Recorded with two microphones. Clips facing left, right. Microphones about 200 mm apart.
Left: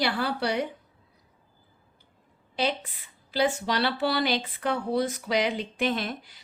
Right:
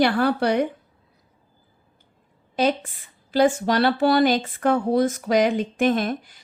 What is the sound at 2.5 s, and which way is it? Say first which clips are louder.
A woman's voice: right 7 dB; 45° right (ahead or behind).